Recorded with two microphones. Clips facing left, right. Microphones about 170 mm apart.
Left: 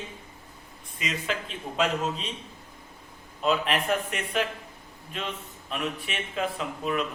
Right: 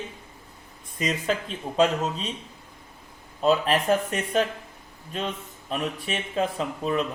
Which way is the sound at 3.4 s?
35° right (ahead or behind).